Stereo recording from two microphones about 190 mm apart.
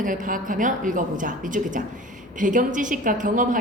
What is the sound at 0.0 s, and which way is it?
A woman's voice, 45° right (ahead or behind).